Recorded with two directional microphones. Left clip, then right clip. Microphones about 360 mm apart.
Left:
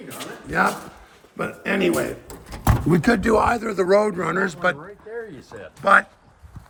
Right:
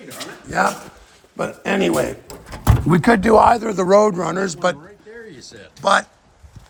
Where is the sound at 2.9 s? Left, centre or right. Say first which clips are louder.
Right 6 dB; centre.